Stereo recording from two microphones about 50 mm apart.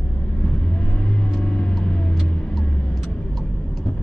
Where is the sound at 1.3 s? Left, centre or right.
Centre.